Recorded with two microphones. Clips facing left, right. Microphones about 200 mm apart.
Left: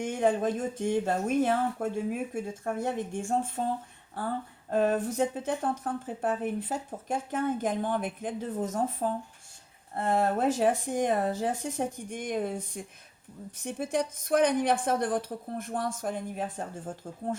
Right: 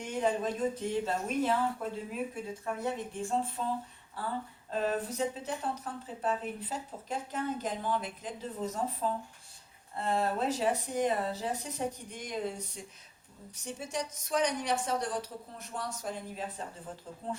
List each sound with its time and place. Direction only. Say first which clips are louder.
0.0 s speech: left 5 dB; 50° left (ahead or behind)
4.7 s speech: left 6 dB; 50° left (ahead or behind)